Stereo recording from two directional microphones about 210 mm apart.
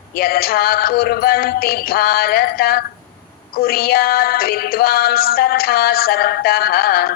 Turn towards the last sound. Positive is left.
turn(degrees=45)  # may be behind; listen again after turning